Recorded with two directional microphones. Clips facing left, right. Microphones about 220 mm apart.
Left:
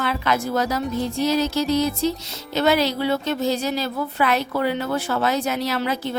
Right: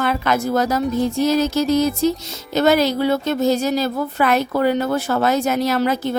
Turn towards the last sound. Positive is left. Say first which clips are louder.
# right 5 dB
turn(degrees=-45)  # may be behind; listen again after turning